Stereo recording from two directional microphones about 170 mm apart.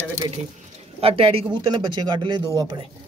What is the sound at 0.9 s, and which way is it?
Speech, 35° right (ahead or behind).